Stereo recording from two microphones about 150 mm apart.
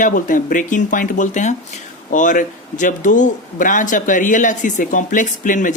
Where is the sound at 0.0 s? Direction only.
65° left (ahead or behind).